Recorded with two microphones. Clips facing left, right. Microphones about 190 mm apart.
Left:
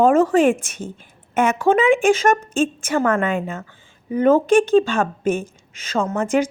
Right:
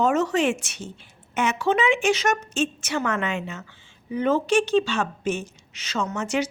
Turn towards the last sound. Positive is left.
turn(degrees=50)  # may be behind; listen again after turning